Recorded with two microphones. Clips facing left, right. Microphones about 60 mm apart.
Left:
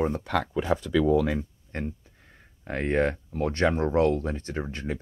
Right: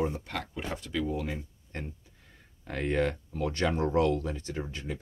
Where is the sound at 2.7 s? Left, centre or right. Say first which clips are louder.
Left 4 dB; left.